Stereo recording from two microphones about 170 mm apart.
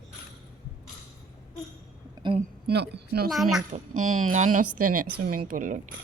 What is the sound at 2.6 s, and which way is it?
Speech, 75° right (ahead or behind).